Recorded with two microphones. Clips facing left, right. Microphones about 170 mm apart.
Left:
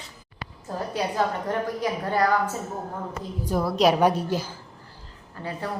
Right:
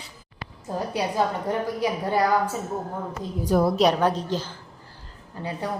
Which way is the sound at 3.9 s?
10° left (ahead or behind).